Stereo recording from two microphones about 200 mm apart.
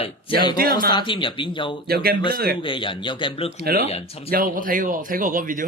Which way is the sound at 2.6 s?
25° left (ahead or behind).